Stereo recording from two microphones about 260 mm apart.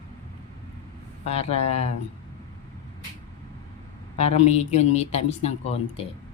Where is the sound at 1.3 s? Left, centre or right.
Left.